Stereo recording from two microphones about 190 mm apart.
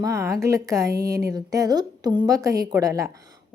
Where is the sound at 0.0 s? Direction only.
15° right (ahead or behind).